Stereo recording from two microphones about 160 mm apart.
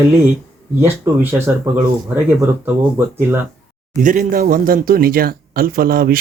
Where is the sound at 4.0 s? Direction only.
55° right (ahead or behind).